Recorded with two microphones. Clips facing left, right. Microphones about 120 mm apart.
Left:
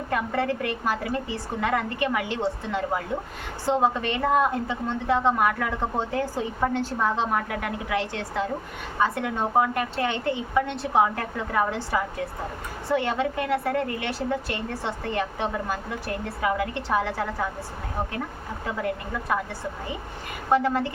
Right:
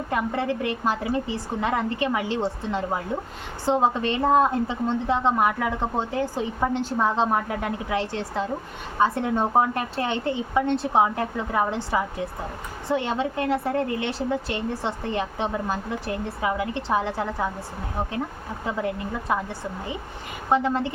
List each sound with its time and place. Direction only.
0.1 s a woman's voice: 20° right (ahead or behind)
3.7 s a woman's voice: 30° right (ahead or behind)
19.3 s a woman's voice: 25° right (ahead or behind)
20.5 s a woman's voice: 20° right (ahead or behind)